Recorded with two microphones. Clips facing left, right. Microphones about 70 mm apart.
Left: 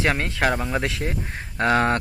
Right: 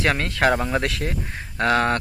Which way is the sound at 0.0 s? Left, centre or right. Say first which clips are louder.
Right 1 dB; centre.